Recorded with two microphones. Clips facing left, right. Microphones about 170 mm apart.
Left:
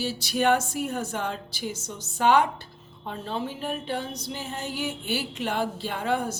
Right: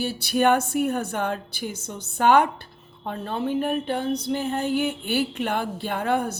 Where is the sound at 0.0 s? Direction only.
55° right (ahead or behind).